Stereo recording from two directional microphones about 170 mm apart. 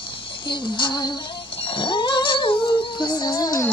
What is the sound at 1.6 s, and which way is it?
Music, 30° left (ahead or behind).